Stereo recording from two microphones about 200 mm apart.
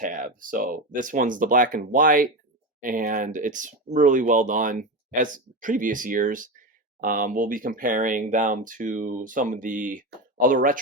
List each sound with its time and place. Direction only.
0.0 s speech: 40° right (ahead or behind)